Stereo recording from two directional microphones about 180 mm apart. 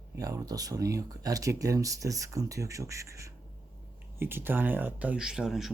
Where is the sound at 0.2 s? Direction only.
20° right (ahead or behind).